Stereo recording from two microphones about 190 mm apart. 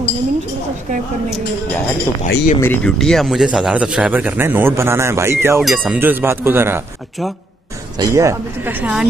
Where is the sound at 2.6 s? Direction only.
5° left (ahead or behind); by 6.8 s 10° right (ahead or behind).